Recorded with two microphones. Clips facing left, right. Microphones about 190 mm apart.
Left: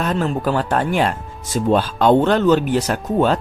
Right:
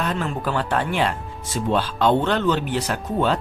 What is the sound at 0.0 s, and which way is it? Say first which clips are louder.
Speech: left 5 dB; 45° left (ahead or behind).